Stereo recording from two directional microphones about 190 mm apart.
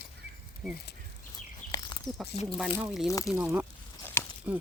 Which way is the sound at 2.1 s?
Centre (ahead or behind).